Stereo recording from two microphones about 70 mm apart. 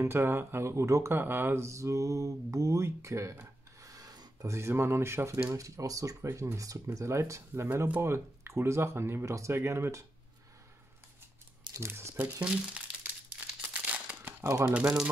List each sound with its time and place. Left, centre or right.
0.0 s speech: right
3.8 s filing: right
4.5 s speech: right
5.5 s speech: right
11.8 s speech: right
13.6 s crumpling: right
14.4 s speech: right